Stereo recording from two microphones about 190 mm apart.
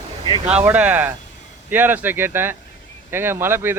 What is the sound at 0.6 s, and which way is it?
Speech, 10° right (ahead or behind).